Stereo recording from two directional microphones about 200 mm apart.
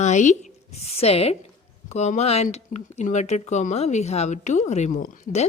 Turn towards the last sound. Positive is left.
turn(degrees=40)  # may be behind; listen again after turning